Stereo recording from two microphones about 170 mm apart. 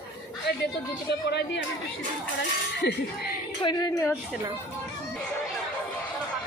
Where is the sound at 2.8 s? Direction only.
85° left.